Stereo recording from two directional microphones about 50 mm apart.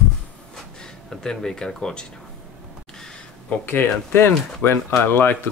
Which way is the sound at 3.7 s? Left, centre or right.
Left.